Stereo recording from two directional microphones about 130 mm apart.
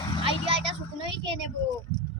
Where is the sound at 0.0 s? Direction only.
40° left (ahead or behind).